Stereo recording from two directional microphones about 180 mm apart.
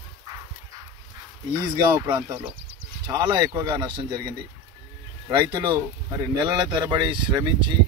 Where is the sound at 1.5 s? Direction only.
20° right (ahead or behind).